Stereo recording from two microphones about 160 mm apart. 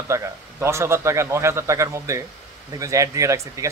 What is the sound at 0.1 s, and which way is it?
A man's voice, 15° right (ahead or behind).